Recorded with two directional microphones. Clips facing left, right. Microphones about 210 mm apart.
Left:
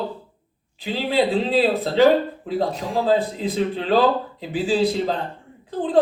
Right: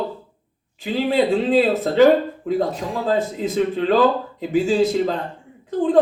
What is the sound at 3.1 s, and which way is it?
Speech, 45° right (ahead or behind).